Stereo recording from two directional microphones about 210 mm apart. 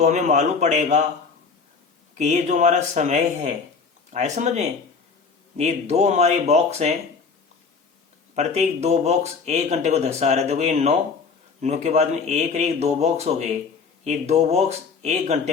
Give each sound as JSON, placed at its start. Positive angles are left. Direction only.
{"t": 0.0, "sound": "speech", "side_deg": -35}
{"t": 2.1, "sound": "speech", "side_deg": -35}
{"t": 8.4, "sound": "speech", "side_deg": -30}